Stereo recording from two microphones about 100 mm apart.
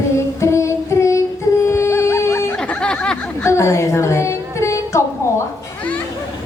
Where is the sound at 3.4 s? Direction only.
30° left (ahead or behind).